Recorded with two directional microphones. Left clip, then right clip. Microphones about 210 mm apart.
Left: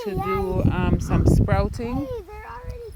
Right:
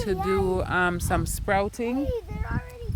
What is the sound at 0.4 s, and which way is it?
Speech, 30° right (ahead or behind).